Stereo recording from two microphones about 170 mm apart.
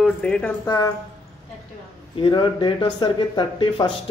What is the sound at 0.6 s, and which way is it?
Speech, 20° left (ahead or behind).